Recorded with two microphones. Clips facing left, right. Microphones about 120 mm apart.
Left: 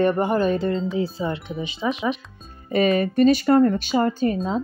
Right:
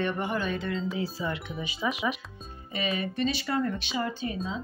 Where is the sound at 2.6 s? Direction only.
50° left (ahead or behind).